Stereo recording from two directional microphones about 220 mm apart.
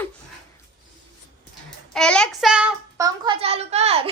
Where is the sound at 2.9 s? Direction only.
20° right (ahead or behind).